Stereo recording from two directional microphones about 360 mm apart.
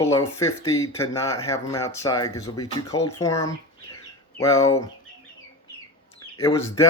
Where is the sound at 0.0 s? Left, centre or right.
Centre.